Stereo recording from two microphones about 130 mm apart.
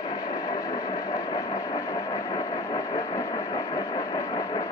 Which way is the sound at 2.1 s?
25° left (ahead or behind).